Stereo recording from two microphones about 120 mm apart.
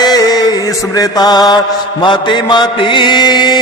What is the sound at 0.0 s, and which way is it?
Mantra, 35° left (ahead or behind).